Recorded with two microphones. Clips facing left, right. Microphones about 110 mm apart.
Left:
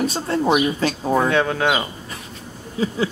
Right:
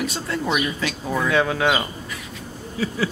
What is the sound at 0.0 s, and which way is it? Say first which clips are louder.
Speech: left 5 dB; 35° left (ahead or behind).